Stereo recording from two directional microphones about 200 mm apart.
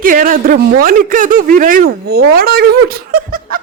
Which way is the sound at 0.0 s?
45° right (ahead or behind).